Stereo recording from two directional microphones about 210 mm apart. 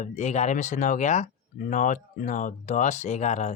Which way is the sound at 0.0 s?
35° left (ahead or behind).